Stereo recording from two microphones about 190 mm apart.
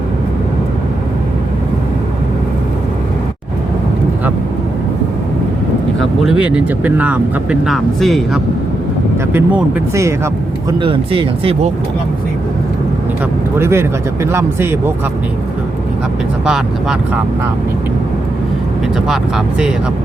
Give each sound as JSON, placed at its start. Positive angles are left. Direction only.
{"t": 6.4, "sound": "speech", "side_deg": -5}
{"t": 10.7, "sound": "speech", "side_deg": -25}
{"t": 13.6, "sound": "speech", "side_deg": -15}
{"t": 19.0, "sound": "speech", "side_deg": -5}